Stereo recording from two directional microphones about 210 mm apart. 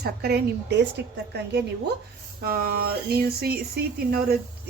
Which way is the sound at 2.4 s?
45° right (ahead or behind).